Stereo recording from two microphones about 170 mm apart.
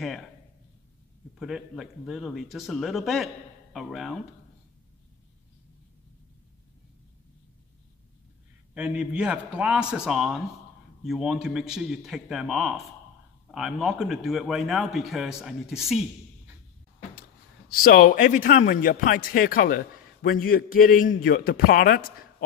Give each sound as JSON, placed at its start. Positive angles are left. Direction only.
{"t": 1.4, "sound": "a man's voice", "side_deg": 0}
{"t": 8.7, "sound": "a man's voice", "side_deg": -5}
{"t": 17.6, "sound": "a man's voice", "side_deg": 60}